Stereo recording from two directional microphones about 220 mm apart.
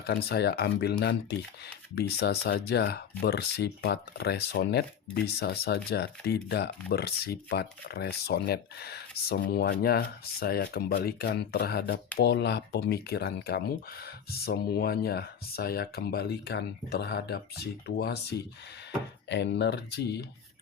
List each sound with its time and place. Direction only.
0.0 s speech: 45° left (ahead or behind)